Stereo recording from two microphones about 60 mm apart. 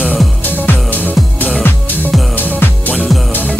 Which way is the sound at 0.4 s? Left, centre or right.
Left.